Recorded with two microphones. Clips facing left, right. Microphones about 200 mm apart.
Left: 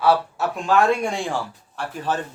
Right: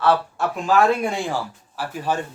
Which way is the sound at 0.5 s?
Centre (ahead or behind).